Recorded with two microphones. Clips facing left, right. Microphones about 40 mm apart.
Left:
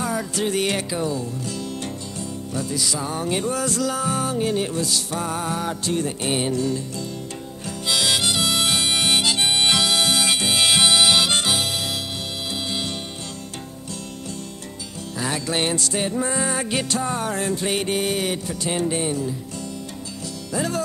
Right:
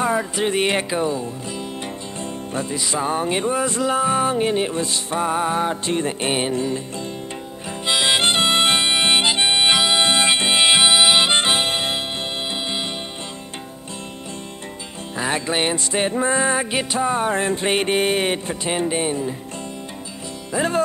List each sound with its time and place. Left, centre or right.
0.0 s music: right
7.8 s harmonica: right
15.1 s music: right
20.5 s music: right